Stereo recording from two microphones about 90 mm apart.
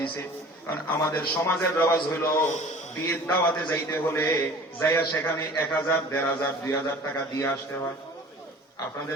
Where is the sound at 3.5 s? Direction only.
25° left (ahead or behind).